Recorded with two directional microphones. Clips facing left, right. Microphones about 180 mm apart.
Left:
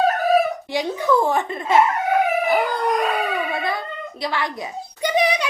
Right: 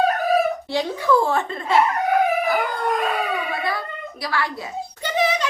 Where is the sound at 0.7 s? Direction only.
15° left (ahead or behind).